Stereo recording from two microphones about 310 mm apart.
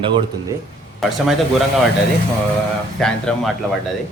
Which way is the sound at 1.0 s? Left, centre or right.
Centre.